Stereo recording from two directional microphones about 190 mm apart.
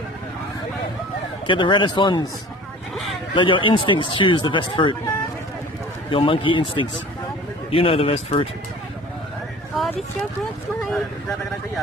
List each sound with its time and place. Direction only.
1.5 s speech: 25° left (ahead or behind)
3.3 s speech: 25° left (ahead or behind)